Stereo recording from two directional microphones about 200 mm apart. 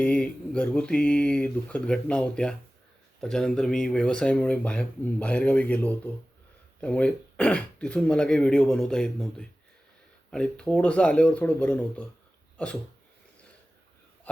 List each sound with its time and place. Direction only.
0.0 s speech: 5° left (ahead or behind)